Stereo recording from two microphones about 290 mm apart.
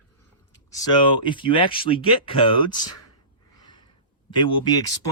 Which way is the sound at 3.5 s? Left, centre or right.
Centre.